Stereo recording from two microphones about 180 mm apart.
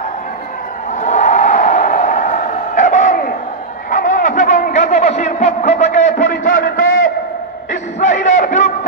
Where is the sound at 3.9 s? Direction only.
45° left (ahead or behind).